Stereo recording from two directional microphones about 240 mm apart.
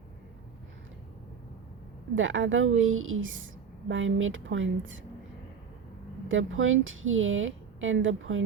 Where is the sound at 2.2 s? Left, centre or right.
Right.